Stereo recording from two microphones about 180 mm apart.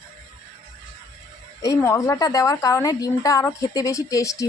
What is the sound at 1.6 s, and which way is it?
A woman's voice, 15° left (ahead or behind).